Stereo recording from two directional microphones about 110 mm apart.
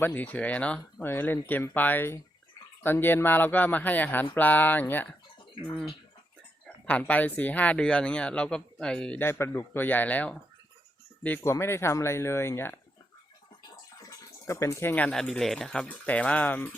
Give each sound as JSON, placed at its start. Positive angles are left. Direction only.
{"t": 0.0, "sound": "speech", "side_deg": 15}
{"t": 6.8, "sound": "speech", "side_deg": 15}
{"t": 9.2, "sound": "speech", "side_deg": 25}
{"t": 11.4, "sound": "speech", "side_deg": 25}
{"t": 14.0, "sound": "speech", "side_deg": 30}